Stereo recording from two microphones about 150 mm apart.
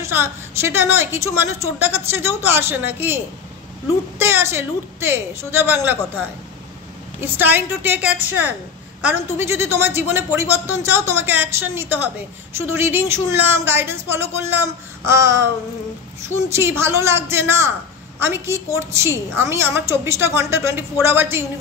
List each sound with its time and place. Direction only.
0.0 s a woman's voice: 15° right (ahead or behind)
4.2 s a woman's voice: 15° right (ahead or behind)
7.2 s a woman's voice: 15° right (ahead or behind)
16.4 s a woman's voice: 15° right (ahead or behind)